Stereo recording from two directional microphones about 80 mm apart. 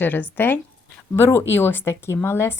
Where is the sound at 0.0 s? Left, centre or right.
Left.